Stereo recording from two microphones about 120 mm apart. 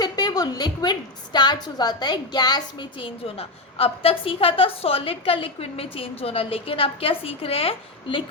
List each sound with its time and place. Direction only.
0.0 s a woman's voice: 35° left (ahead or behind)
3.2 s a woman's voice: 55° left (ahead or behind)